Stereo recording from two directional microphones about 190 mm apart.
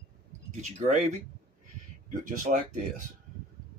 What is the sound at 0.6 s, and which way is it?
Speech, 40° right (ahead or behind).